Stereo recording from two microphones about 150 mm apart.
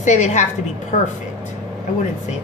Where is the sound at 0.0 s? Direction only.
55° left (ahead or behind).